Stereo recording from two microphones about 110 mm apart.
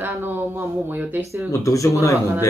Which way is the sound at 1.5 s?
30° left (ahead or behind).